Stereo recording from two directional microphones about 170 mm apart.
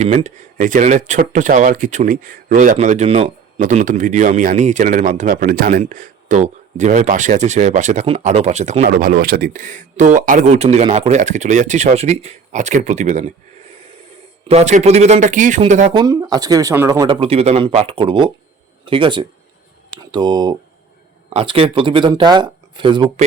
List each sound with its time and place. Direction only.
0.0 s speech: 40° right (ahead or behind)
9.0 s speech: 55° right (ahead or behind)
14.4 s speech: 40° right (ahead or behind)
15.9 s speech: 25° right (ahead or behind)
17.1 s speech: 35° right (ahead or behind)